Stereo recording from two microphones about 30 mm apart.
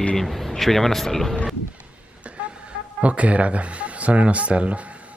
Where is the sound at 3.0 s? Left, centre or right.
Right.